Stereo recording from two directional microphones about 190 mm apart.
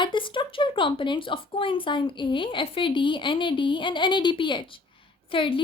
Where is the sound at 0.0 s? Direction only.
25° left (ahead or behind).